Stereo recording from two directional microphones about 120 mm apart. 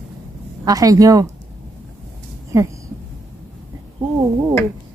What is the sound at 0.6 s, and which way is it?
Speech, 30° right (ahead or behind).